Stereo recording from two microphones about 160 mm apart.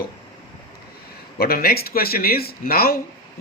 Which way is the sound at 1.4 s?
70° left (ahead or behind).